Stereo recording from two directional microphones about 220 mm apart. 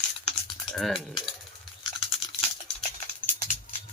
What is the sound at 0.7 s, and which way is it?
Speech, centre (ahead or behind).